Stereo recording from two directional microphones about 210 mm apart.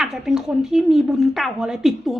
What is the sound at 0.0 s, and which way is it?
Speech, centre (ahead or behind).